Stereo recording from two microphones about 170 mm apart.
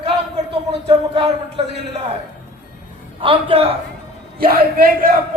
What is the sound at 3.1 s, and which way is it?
Speech, 35° right (ahead or behind).